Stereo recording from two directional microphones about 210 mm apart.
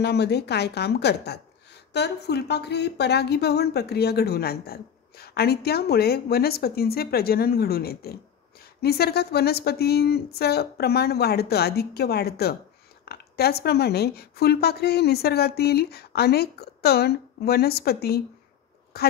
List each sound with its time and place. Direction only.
0.0 s a woman's voice: 50° left (ahead or behind)